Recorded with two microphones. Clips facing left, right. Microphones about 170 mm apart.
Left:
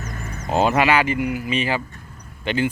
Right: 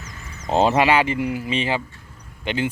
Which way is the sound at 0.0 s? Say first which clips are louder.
Left 7 dB; 55° left (ahead or behind).